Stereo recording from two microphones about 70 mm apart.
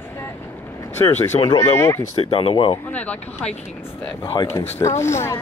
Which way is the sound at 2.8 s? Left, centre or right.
Centre.